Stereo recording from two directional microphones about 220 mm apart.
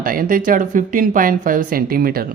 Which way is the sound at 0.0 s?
40° right (ahead or behind).